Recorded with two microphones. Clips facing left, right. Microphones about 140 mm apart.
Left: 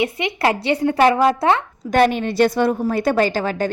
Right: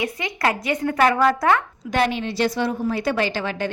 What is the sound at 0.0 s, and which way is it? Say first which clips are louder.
A woman's voice: left 4 dB; 25° left (ahead or behind).